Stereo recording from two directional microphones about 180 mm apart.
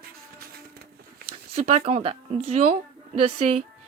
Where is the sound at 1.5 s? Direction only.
35° right (ahead or behind).